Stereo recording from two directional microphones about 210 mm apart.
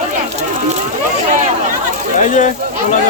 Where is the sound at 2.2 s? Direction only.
35° left (ahead or behind).